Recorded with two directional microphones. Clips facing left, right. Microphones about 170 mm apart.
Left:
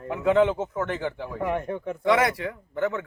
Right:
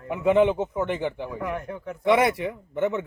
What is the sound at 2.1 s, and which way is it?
Speech, 20° right (ahead or behind).